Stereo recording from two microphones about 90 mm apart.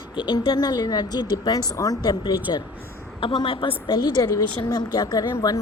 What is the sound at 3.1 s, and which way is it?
A woman's voice, 65° left (ahead or behind).